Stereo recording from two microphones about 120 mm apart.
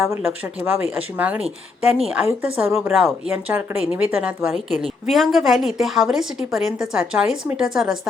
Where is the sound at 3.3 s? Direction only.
15° right (ahead or behind).